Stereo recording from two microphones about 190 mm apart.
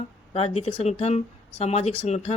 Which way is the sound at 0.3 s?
30° left (ahead or behind).